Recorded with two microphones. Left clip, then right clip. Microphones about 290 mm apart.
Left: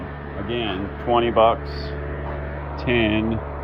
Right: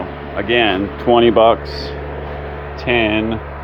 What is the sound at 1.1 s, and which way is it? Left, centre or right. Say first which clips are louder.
Speech: right 7 dB; right.